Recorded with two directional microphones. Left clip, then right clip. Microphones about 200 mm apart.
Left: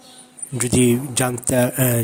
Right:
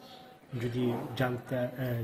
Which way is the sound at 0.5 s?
45° left (ahead or behind).